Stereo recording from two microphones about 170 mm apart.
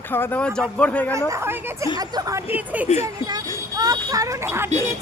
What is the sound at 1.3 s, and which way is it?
A woman's voice, 15° right (ahead or behind).